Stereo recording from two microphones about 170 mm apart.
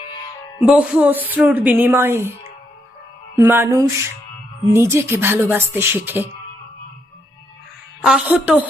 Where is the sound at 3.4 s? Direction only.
15° right (ahead or behind).